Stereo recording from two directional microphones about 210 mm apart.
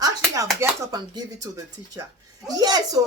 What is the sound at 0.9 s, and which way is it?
Speech, 20° right (ahead or behind).